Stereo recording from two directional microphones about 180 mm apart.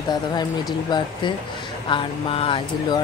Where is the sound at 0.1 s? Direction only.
25° left (ahead or behind).